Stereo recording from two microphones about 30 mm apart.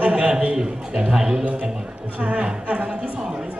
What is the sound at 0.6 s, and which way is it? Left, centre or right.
Speech, right.